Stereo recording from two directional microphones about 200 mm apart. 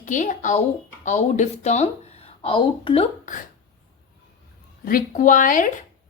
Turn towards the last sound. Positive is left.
turn(degrees=40)  # may be behind; listen again after turning